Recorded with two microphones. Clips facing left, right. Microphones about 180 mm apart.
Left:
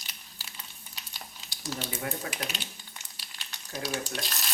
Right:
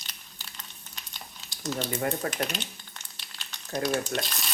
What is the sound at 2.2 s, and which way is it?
Speech, 55° right (ahead or behind).